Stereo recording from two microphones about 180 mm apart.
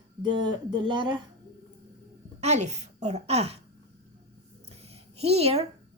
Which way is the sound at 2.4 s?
40° right (ahead or behind).